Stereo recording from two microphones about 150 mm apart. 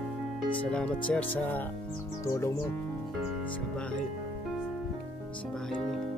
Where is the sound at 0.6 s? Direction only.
5° left (ahead or behind).